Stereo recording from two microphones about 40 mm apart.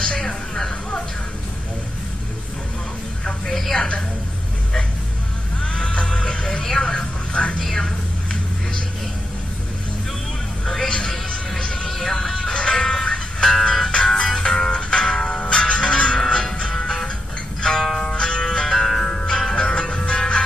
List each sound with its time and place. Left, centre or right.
0.0 s a sound: left
3.4 s a sound: centre
5.6 s music: left
10.7 s music: centre
11.9 s music: centre
13.5 s music: centre
19.6 s music: left